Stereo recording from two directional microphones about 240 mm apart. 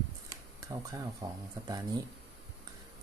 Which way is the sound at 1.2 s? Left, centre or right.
Centre.